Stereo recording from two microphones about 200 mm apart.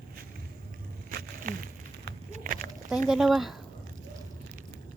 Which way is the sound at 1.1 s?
50° right (ahead or behind).